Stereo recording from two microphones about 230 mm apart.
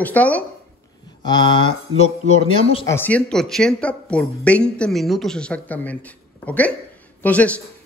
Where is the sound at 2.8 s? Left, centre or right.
Centre.